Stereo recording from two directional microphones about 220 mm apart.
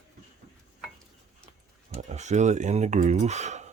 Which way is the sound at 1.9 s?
30° right (ahead or behind).